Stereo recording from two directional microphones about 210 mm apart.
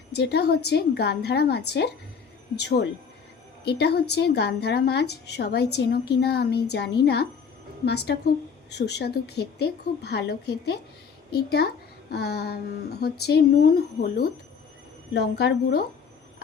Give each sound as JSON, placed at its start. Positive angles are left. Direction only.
{"t": 0.1, "sound": "speech", "side_deg": 50}